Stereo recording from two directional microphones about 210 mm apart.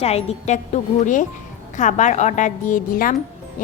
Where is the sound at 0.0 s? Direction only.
30° left (ahead or behind).